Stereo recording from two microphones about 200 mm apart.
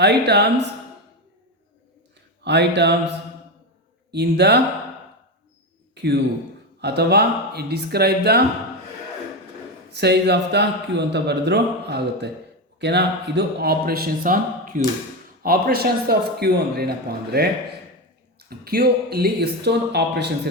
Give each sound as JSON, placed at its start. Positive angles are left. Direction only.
{"t": 0.0, "sound": "speech", "side_deg": -55}
{"t": 2.4, "sound": "speech", "side_deg": -60}
{"t": 4.1, "sound": "speech", "side_deg": -55}
{"t": 5.9, "sound": "a man's voice", "side_deg": -55}
{"t": 9.9, "sound": "speech", "side_deg": -55}